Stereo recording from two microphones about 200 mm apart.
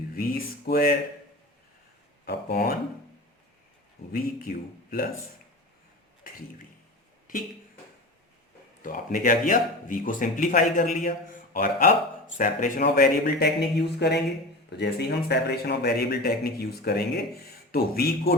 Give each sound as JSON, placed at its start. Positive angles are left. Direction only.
{"t": 0.1, "sound": "a man's voice", "side_deg": 45}
{"t": 2.2, "sound": "a man's voice", "side_deg": 50}
{"t": 4.1, "sound": "a man's voice", "side_deg": 45}
{"t": 7.3, "sound": "speech", "side_deg": 45}
{"t": 8.8, "sound": "a man's voice", "side_deg": 40}
{"t": 14.7, "sound": "a man's voice", "side_deg": 55}